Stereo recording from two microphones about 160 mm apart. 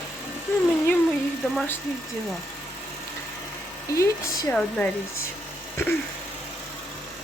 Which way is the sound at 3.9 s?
20° left (ahead or behind).